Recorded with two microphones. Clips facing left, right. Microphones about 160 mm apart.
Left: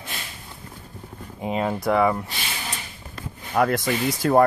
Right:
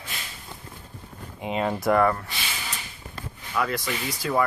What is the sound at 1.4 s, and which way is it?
Speech, 5° left (ahead or behind).